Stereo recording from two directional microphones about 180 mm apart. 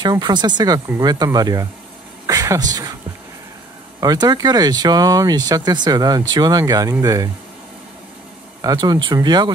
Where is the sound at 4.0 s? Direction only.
20° right (ahead or behind).